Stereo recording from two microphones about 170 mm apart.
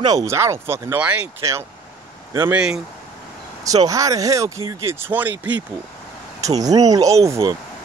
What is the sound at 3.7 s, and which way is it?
Speech, 20° right (ahead or behind).